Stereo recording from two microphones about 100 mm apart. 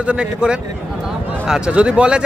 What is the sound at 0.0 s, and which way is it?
Speech, 10° right (ahead or behind).